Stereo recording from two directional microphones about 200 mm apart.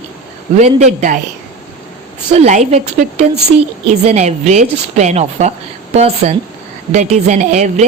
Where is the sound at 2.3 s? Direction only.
35° right (ahead or behind).